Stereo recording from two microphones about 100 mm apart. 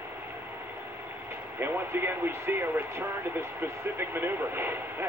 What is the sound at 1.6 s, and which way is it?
Speech, 20° right (ahead or behind).